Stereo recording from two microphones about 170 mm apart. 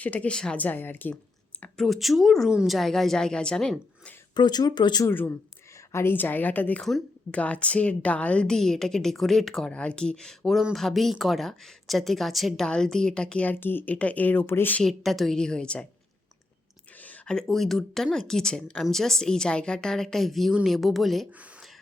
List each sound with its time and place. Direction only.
0.0 s a woman's voice: 10° left (ahead or behind)
4.4 s speech: 25° left (ahead or behind)
5.9 s a woman's voice: 15° left (ahead or behind)
17.0 s a woman's voice: 5° left (ahead or behind)